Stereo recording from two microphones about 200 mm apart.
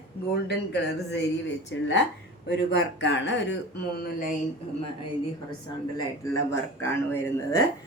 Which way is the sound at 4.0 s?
45° left (ahead or behind).